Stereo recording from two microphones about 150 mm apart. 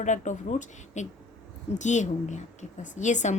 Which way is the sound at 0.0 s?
55° left (ahead or behind).